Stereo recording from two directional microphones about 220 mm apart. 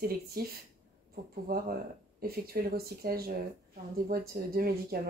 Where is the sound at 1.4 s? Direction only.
40° right (ahead or behind).